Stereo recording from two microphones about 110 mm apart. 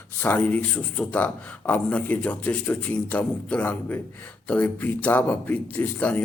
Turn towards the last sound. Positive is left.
turn(degrees=15)  # may be behind; listen again after turning